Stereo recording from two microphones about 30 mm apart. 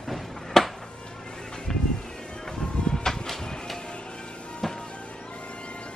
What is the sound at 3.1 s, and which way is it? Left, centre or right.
Music, centre.